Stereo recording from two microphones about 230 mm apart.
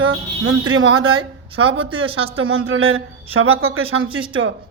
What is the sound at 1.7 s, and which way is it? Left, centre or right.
Speech, right.